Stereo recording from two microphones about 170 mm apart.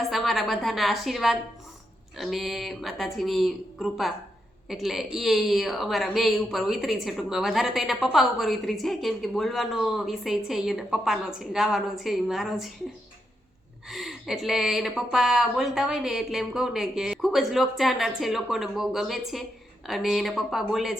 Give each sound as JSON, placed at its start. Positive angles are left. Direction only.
{"t": 0.1, "sound": "a woman's voice", "side_deg": 0}
{"t": 13.8, "sound": "a woman's voice", "side_deg": 0}